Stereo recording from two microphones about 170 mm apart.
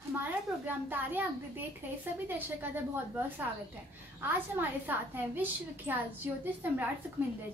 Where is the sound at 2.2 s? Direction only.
10° right (ahead or behind).